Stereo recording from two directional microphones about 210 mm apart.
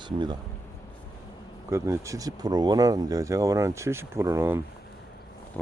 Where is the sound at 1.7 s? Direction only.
15° right (ahead or behind).